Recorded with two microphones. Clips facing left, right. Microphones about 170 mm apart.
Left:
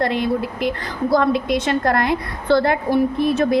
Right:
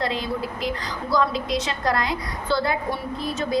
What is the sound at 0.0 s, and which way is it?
A woman's voice, 60° left (ahead or behind).